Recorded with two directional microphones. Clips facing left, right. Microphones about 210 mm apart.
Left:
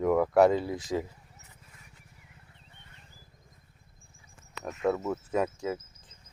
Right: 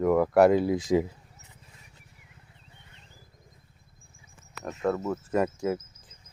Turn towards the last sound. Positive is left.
turn(degrees=-5)  # may be behind; listen again after turning